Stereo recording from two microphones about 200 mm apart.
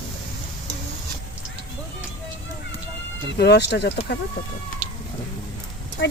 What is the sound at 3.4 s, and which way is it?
Speech, 55° left (ahead or behind).